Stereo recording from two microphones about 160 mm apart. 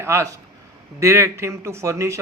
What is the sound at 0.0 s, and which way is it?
A man's voice, 20° right (ahead or behind).